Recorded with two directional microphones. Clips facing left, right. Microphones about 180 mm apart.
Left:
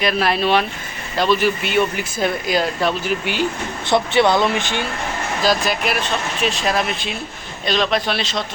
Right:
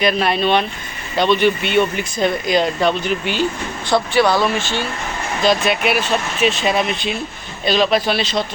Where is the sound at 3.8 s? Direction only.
25° left (ahead or behind).